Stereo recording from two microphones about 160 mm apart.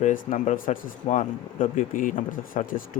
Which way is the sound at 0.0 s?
55° left (ahead or behind).